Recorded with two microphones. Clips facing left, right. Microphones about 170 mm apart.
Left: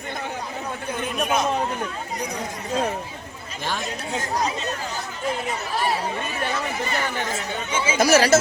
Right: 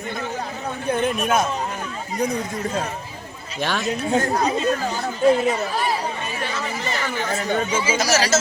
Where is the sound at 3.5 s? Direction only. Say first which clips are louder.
Right 5 dB; 75° right (ahead or behind); by 4.5 s 55° right (ahead or behind).